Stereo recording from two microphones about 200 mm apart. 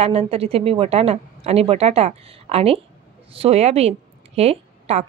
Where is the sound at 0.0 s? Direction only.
30° right (ahead or behind).